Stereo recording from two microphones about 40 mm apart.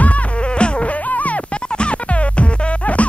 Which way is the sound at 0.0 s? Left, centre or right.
Left.